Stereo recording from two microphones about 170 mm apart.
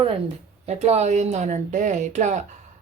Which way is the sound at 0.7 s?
40° right (ahead or behind).